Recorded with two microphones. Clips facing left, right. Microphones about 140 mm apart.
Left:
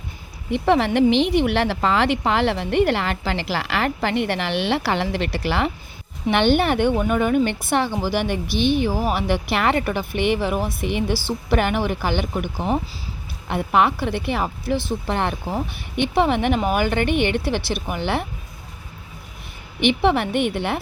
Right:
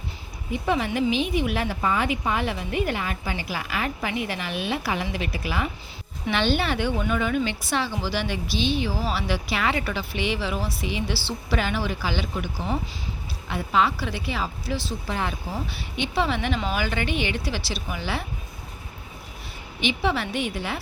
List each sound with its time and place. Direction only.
0.6 s a woman's voice: 65° left (ahead or behind)
6.3 s a woman's voice: 60° left (ahead or behind)
19.8 s a woman's voice: 60° left (ahead or behind)